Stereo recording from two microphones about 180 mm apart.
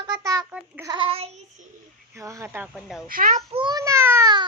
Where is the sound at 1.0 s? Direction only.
35° right (ahead or behind).